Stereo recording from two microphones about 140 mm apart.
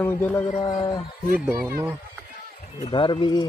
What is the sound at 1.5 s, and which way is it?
Speech, 20° right (ahead or behind).